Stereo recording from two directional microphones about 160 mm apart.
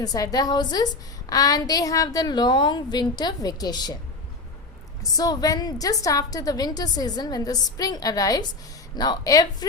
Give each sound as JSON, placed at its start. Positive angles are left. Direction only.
{"t": 0.0, "sound": "a woman's voice", "side_deg": 25}
{"t": 5.1, "sound": "a woman's voice", "side_deg": 25}